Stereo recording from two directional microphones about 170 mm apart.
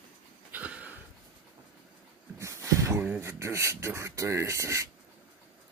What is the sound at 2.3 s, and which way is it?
Speech, 15° right (ahead or behind).